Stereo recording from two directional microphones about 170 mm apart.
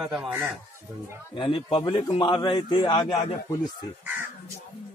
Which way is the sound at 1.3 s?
30° left (ahead or behind).